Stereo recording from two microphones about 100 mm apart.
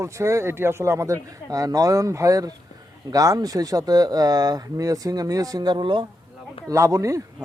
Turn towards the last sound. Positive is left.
turn(degrees=-35)  # may be behind; listen again after turning